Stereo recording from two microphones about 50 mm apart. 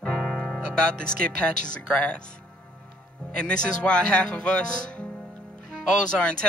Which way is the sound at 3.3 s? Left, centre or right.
Centre.